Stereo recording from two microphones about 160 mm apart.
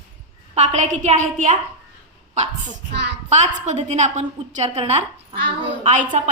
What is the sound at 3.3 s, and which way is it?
A woman's voice, 45° right (ahead or behind).